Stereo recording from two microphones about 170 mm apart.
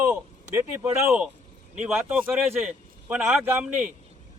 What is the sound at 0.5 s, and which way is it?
A man's voice, 10° right (ahead or behind).